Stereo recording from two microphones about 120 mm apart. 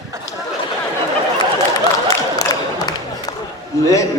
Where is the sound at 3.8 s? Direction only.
25° left (ahead or behind).